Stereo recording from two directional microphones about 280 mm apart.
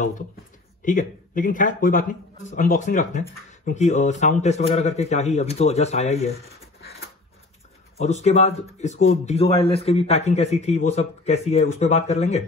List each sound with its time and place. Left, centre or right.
0.8 s a man's voice: left
8.0 s a man's voice: left